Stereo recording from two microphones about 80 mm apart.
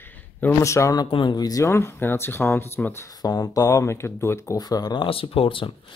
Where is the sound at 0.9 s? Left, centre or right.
Left.